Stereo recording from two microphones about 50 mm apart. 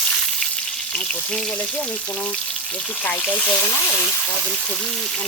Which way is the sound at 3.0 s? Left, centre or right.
Left.